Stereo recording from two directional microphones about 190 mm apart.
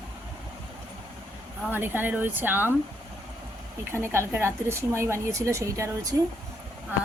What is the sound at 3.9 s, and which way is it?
A woman's voice, 15° right (ahead or behind).